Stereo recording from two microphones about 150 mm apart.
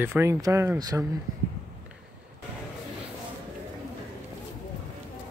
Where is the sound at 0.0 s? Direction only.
15° right (ahead or behind).